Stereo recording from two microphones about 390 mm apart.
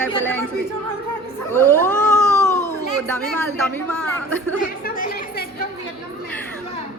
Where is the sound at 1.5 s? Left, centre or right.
Centre.